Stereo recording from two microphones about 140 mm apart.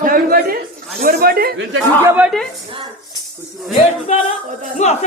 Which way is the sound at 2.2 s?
Centre (ahead or behind).